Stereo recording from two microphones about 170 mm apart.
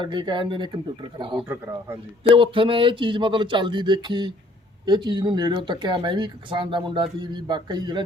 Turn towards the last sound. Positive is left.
turn(degrees=-25)  # may be behind; listen again after turning